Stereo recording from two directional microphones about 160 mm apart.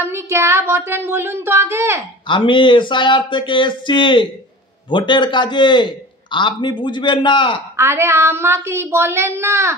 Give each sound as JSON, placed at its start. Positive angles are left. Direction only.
{"t": 0.0, "sound": "a woman's voice", "side_deg": -15}
{"t": 2.2, "sound": "a man's voice", "side_deg": 30}
{"t": 7.7, "sound": "a woman's voice", "side_deg": -15}